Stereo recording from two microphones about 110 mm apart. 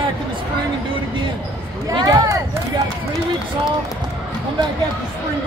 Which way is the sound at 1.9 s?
40° right (ahead or behind).